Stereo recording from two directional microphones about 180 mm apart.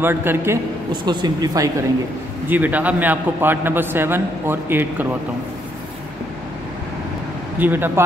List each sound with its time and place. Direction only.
0.0 s a man's voice: 10° right (ahead or behind)
1.0 s speech: 25° right (ahead or behind)
2.4 s a man's voice: 10° right (ahead or behind)
7.5 s a man's voice: 10° right (ahead or behind)